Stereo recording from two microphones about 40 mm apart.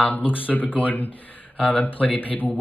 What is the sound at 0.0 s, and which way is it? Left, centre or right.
Speech, left.